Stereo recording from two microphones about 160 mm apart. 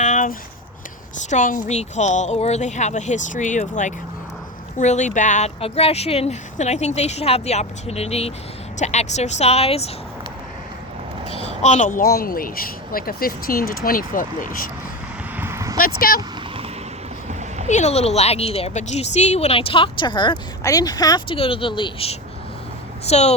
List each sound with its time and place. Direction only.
0.0 s a sound: 55° left (ahead or behind)
1.3 s a woman's voice: 55° left (ahead or behind)
11.3 s speech: 45° left (ahead or behind); by 14.7 s 60° left (ahead or behind)
15.4 s vehicle: 15° right (ahead or behind)
15.8 s speech: 65° left (ahead or behind)
17.7 s a woman's voice: 45° left (ahead or behind); by 21.3 s 25° left (ahead or behind)
21.3 s a woman's voice: 35° left (ahead or behind)